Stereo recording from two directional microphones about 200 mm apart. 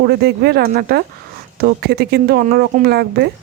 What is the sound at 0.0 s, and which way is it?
Speech, 55° right (ahead or behind).